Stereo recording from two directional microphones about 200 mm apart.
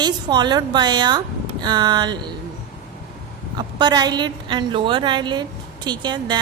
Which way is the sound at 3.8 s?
20° right (ahead or behind).